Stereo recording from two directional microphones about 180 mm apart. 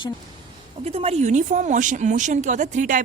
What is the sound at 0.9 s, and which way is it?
Speech, 35° right (ahead or behind).